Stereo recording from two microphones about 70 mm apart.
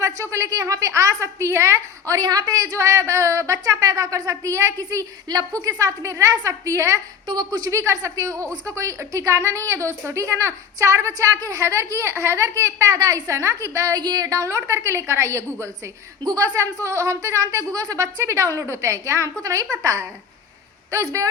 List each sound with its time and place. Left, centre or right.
0.0 s a woman's voice: right
3.6 s a woman's voice: right
7.3 s speech: right
7.7 s a woman's voice: right
14.0 s a woman's voice: right
16.2 s a woman's voice: right